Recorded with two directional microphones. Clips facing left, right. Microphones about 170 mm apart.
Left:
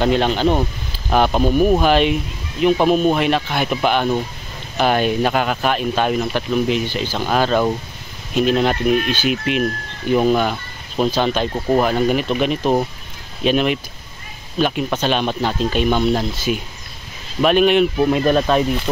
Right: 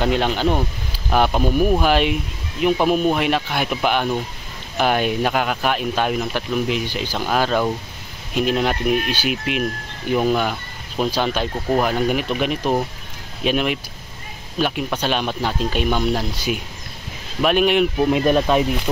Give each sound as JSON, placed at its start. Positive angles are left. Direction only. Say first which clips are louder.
{"t": 0.0, "sound": "speech", "louder": "left 3 dB", "side_deg": -10}